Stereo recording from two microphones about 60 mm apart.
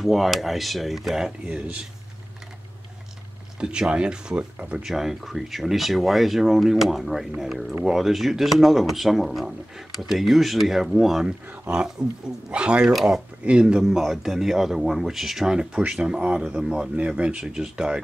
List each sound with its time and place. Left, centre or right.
0.0 s speech: centre
3.5 s speech: centre
4.8 s speech: centre
12.8 s speech: centre
13.4 s speech: centre